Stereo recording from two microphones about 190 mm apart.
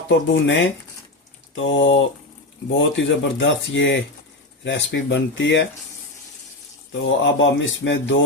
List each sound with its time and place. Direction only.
0.1 s speech: 75° left (ahead or behind)
7.0 s speech: 65° left (ahead or behind)